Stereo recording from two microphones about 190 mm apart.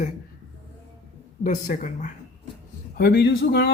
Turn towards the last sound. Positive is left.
turn(degrees=60)  # may be behind; listen again after turning